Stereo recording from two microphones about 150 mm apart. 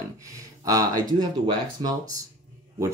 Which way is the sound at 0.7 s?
25° right (ahead or behind).